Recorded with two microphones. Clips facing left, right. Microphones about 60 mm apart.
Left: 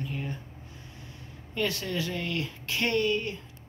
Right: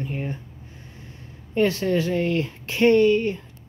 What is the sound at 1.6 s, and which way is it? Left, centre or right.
Speech, right.